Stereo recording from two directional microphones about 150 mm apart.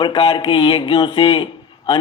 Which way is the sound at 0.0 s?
35° left (ahead or behind).